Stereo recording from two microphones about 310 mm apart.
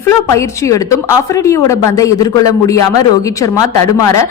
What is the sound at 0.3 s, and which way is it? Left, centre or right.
Speech, centre.